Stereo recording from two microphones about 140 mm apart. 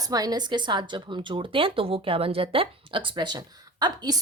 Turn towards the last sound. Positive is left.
turn(degrees=-30)  # may be behind; listen again after turning